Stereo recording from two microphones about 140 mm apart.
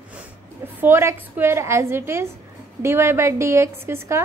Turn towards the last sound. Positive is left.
turn(degrees=-20)  # may be behind; listen again after turning